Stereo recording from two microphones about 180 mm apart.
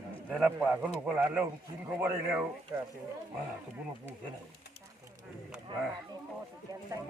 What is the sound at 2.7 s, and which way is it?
Speech, 15° right (ahead or behind).